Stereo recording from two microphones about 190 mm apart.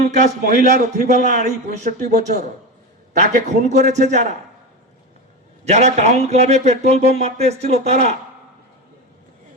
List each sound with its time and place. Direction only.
0.1 s speech: 40° right (ahead or behind)
5.6 s speech: 35° right (ahead or behind)